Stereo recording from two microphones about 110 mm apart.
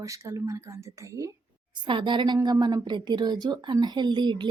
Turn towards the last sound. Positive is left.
turn(degrees=-40)  # may be behind; listen again after turning